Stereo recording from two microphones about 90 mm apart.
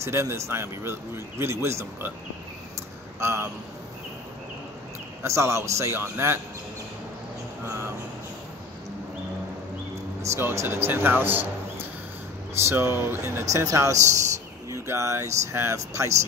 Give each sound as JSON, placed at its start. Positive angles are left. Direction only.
{"t": 0.0, "sound": "speech", "side_deg": -30}
{"t": 3.2, "sound": "speech", "side_deg": -30}
{"t": 5.2, "sound": "speech", "side_deg": -30}
{"t": 10.2, "sound": "speech", "side_deg": -30}